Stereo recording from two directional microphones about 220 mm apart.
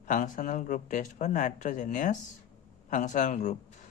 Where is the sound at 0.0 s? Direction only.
35° left (ahead or behind).